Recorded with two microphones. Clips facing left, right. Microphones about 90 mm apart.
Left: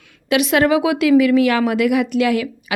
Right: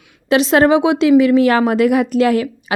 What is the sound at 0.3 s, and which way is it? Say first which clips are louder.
A woman's voice: right 3 dB; 30° right (ahead or behind).